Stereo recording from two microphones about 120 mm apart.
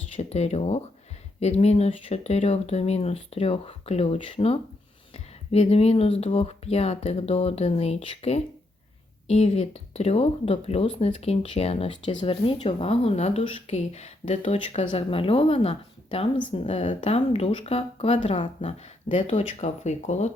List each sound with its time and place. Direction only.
0.2 s speech: 65° left (ahead or behind)
16.6 s speech: 65° left (ahead or behind)
17.0 s speech: 55° left (ahead or behind); by 20.3 s 70° left (ahead or behind)